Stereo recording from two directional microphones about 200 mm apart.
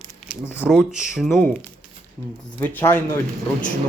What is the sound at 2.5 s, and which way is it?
Speech, 10° left (ahead or behind).